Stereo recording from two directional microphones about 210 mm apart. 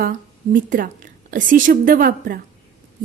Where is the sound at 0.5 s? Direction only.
40° right (ahead or behind).